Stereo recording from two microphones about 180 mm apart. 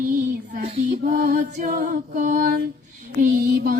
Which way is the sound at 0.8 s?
45° right (ahead or behind).